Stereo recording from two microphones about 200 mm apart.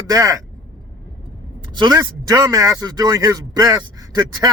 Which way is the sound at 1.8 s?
20° right (ahead or behind).